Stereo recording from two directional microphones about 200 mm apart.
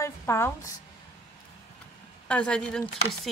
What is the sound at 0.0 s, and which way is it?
Speech, 15° left (ahead or behind).